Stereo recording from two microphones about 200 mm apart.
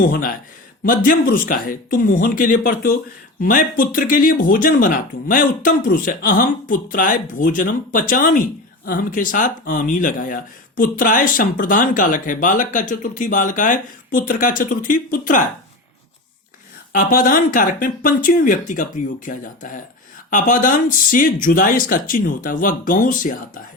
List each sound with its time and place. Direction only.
0.0 s speech: 45° left (ahead or behind)
16.9 s speech: 45° left (ahead or behind)